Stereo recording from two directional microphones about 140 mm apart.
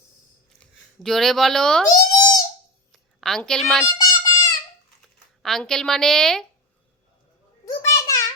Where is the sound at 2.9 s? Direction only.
Centre (ahead or behind).